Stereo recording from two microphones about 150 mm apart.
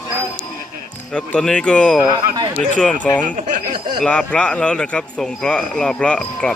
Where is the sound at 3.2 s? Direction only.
60° right (ahead or behind).